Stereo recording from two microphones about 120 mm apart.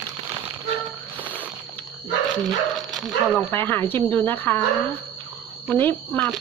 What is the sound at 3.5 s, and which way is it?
Speech, 15° left (ahead or behind).